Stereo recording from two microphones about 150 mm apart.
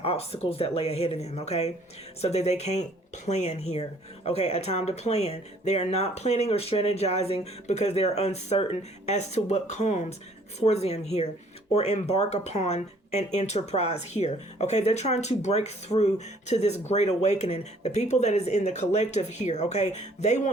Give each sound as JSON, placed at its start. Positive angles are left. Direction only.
{"t": 0.0, "sound": "speech", "side_deg": 40}